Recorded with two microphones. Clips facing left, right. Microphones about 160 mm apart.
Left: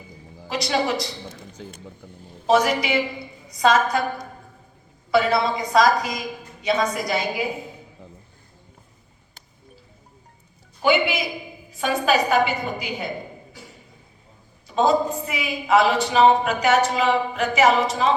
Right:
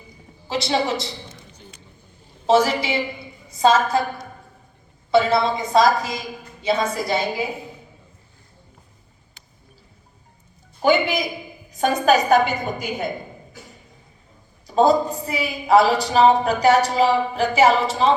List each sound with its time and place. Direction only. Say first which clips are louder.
0.4 s a woman's voice: right 1 dB; 25° right (ahead or behind)
2.5 s a woman's voice: right 1 dB; 30° right (ahead or behind)
5.1 s a woman's voice: right 2 dB; 25° right (ahead or behind)
10.8 s a woman's voice: right 2 dB; 40° right (ahead or behind)
14.8 s a woman's voice: right 3 dB; 35° right (ahead or behind)